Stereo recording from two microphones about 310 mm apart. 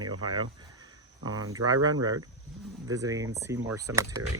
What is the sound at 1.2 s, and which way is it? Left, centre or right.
Speech, centre.